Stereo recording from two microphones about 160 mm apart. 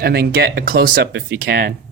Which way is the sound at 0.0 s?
75° right (ahead or behind).